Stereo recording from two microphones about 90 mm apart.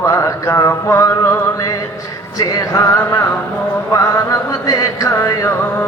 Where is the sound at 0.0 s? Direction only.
35° left (ahead or behind).